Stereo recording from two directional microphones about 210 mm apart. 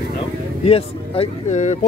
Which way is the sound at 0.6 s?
30° left (ahead or behind).